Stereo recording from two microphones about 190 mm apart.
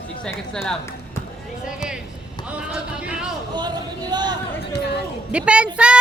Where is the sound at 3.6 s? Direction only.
20° right (ahead or behind).